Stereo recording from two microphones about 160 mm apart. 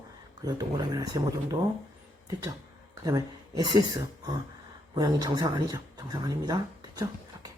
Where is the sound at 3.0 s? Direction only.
20° right (ahead or behind).